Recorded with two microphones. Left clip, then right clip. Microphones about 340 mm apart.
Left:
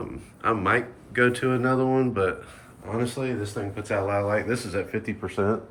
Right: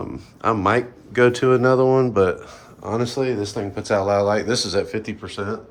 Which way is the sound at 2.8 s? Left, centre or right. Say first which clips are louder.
Right 5 dB; right.